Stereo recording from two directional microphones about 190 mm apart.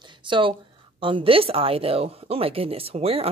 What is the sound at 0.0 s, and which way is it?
A woman's voice, 25° right (ahead or behind).